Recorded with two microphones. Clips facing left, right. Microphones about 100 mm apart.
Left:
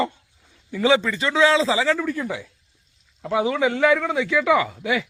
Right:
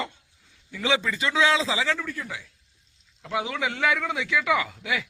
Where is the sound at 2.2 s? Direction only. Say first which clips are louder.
Left 8 dB; 55° left (ahead or behind).